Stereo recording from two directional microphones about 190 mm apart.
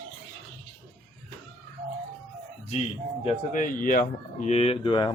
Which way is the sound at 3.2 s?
40° left (ahead or behind).